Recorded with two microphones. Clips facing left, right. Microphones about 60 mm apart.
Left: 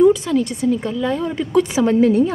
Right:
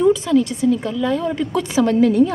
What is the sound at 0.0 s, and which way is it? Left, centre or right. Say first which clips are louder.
A woman's voice: left 1 dB; centre.